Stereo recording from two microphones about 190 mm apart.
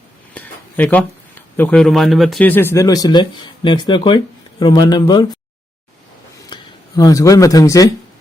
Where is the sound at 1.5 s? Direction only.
5° left (ahead or behind).